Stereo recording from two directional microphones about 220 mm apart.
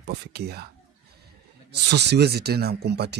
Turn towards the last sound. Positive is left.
turn(degrees=-50)  # may be behind; listen again after turning